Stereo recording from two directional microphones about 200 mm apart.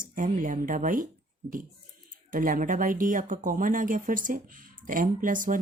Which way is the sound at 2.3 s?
45° right (ahead or behind).